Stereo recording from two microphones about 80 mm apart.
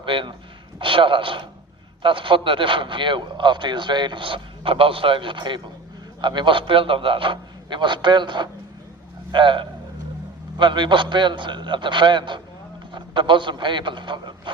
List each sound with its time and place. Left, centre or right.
0.0 s a man's voice: right
9.3 s a man's voice: right
10.6 s a man's voice: right